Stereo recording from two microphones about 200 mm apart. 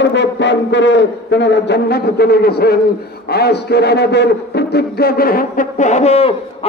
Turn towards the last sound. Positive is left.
turn(degrees=30)  # may be behind; listen again after turning